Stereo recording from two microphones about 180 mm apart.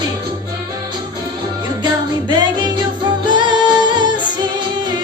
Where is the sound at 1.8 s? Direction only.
25° right (ahead or behind).